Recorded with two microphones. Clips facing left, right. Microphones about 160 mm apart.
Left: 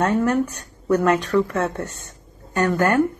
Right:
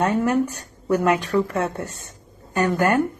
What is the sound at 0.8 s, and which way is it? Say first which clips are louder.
A woman's voice: left 1 dB; 15° right (ahead or behind).